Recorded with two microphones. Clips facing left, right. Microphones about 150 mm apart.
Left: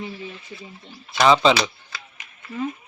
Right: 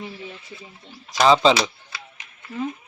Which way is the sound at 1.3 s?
30° right (ahead or behind).